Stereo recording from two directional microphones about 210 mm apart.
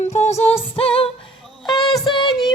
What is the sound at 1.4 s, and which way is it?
Music, centre (ahead or behind).